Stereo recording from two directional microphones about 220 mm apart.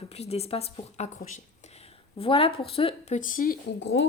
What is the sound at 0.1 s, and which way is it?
A woman's voice, 30° left (ahead or behind).